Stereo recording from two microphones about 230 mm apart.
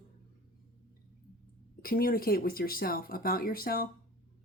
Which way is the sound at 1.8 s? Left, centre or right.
Left.